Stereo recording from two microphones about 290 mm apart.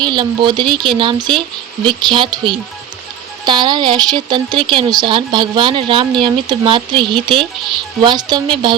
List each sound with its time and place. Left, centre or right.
0.0 s a woman's voice: centre